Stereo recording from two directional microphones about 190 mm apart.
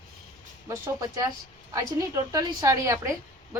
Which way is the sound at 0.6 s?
15° right (ahead or behind).